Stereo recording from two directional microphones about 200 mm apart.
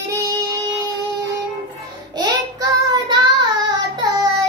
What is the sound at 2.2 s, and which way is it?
Child singing, 20° right (ahead or behind).